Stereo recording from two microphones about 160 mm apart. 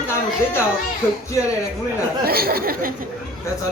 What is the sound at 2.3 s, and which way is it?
Speech, 70° right (ahead or behind).